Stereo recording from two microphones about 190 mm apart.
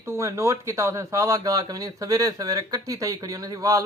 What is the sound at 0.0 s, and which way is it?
Speech, 15° right (ahead or behind).